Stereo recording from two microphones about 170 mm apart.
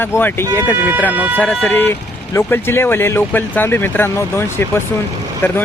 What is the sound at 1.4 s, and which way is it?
Speech, 10° left (ahead or behind).